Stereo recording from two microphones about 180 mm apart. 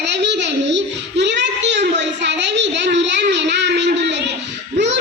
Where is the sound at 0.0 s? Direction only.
70° right (ahead or behind).